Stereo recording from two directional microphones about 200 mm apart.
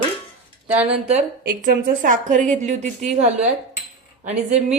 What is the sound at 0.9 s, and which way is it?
A woman's voice, 30° right (ahead or behind).